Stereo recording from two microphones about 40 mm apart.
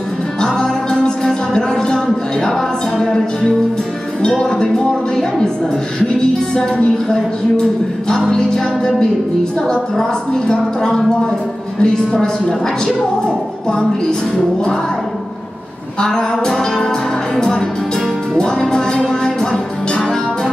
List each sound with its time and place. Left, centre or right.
0.4 s music: centre
3.0 s music: centre
4.2 s speech: centre
7.1 s music: centre
16.0 s music: centre